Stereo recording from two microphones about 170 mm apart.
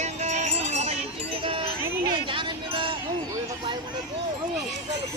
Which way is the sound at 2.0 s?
30° right (ahead or behind).